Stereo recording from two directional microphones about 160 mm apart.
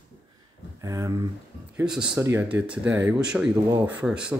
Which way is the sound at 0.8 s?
20° right (ahead or behind).